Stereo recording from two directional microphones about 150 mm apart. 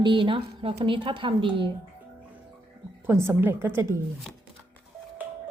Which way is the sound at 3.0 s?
15° right (ahead or behind).